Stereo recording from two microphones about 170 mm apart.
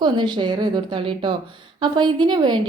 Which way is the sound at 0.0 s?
25° right (ahead or behind).